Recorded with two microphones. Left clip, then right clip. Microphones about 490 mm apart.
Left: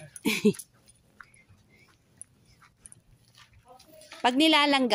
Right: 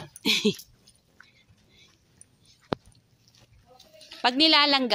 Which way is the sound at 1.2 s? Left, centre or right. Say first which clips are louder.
Left 3 dB; right.